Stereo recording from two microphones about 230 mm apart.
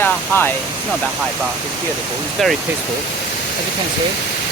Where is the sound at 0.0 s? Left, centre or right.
Centre.